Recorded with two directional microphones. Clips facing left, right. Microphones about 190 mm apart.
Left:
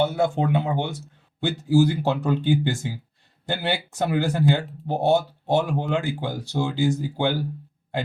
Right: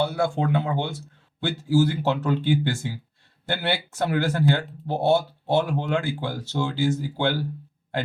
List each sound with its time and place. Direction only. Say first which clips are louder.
0.0 s speech: left 2 dB; 20° left (ahead or behind)